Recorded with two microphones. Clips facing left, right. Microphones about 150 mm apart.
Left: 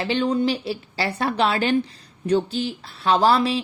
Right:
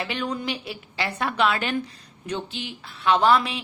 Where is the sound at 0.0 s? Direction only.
30° left (ahead or behind).